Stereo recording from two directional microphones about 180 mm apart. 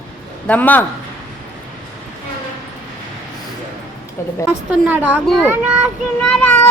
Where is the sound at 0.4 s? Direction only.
10° left (ahead or behind).